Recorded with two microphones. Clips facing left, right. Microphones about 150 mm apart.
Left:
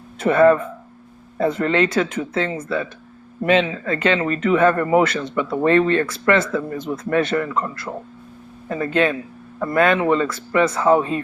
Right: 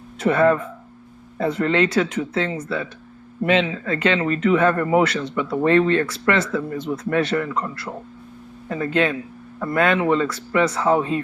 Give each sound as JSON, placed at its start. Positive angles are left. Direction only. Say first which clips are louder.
{"t": 0.2, "sound": "speech", "louder": "left 3 dB", "side_deg": 45}